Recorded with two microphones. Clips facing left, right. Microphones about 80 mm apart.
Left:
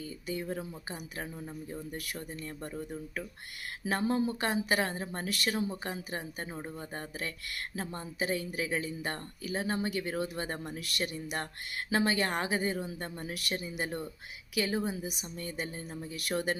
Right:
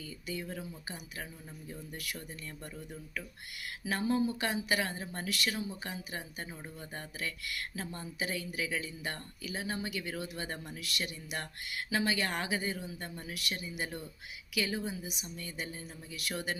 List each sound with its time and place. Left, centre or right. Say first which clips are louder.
0.0 s a woman's voice: left 4 dB; left